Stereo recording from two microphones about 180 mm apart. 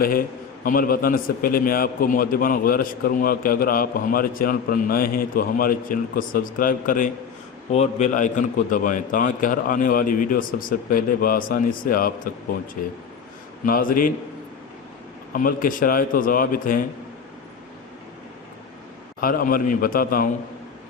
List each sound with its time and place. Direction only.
0.0 s a man's voice: 55° left (ahead or behind)
7.7 s a man's voice: 40° left (ahead or behind)
13.7 s a man's voice: 50° left (ahead or behind)
15.3 s a man's voice: 50° left (ahead or behind)
19.2 s a man's voice: 55° left (ahead or behind)